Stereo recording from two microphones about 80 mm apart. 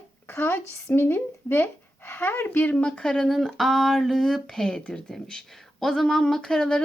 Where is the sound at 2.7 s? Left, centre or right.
Centre.